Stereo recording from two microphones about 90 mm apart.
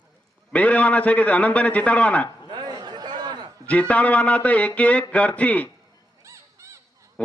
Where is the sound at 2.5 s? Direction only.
55° right (ahead or behind).